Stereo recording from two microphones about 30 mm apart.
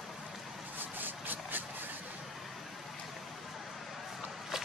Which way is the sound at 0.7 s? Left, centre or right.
Right.